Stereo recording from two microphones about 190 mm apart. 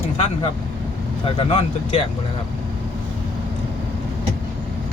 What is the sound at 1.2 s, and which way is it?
Speech, 30° left (ahead or behind).